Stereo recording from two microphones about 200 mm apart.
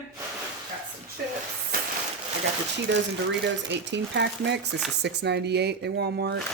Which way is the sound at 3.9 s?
60° right (ahead or behind).